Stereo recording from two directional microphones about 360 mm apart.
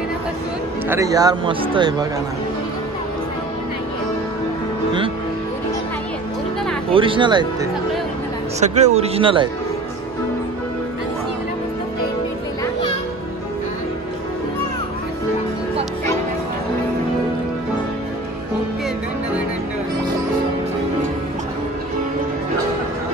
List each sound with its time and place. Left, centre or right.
0.8 s a man's voice: centre
6.9 s a man's voice: centre
8.5 s a man's voice: centre